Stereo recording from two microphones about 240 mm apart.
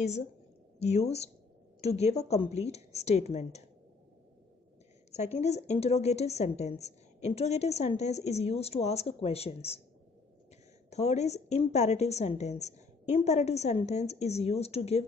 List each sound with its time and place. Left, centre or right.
0.8 s a woman's voice: left
5.1 s a woman's voice: left
10.9 s a woman's voice: left